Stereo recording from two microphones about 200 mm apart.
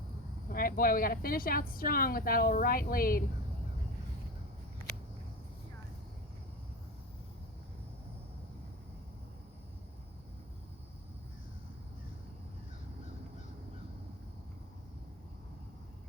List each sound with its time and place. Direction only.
0.5 s a woman's voice: 45° left (ahead or behind)